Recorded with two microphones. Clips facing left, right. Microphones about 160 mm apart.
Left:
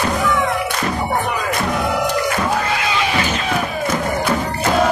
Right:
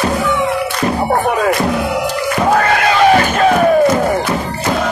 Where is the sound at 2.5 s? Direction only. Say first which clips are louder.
Right 7 dB; 60° right (ahead or behind).